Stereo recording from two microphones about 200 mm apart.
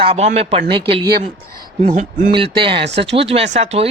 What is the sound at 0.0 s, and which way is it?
Speech, 30° right (ahead or behind).